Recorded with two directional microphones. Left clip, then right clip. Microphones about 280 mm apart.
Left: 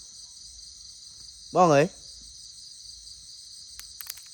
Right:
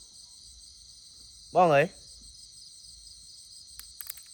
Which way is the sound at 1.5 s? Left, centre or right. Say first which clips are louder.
Left 2 dB; left.